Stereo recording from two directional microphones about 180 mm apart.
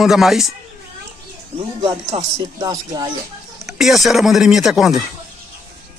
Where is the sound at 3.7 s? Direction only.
Centre (ahead or behind).